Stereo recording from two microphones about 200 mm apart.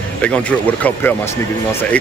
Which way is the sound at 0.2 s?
5° left (ahead or behind).